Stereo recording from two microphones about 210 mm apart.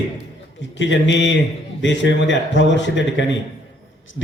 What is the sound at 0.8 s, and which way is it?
A man's voice, 60° left (ahead or behind).